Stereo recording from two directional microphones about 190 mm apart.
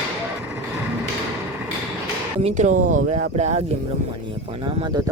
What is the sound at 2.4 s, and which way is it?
Speech, 40° right (ahead or behind).